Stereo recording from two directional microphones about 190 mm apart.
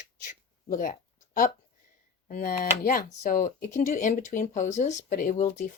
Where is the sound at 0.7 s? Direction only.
45° left (ahead or behind).